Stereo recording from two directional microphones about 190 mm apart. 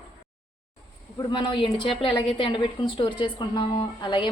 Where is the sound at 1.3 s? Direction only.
25° left (ahead or behind).